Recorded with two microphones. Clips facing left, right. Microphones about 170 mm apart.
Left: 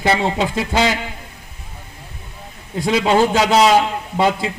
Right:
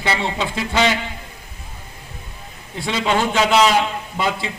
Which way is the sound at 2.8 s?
40° left (ahead or behind).